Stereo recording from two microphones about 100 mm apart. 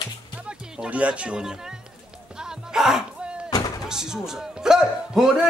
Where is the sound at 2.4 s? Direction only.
5° right (ahead or behind).